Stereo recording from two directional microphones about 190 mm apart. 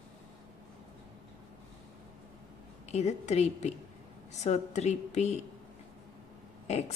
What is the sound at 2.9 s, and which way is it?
A woman's voice, 35° left (ahead or behind).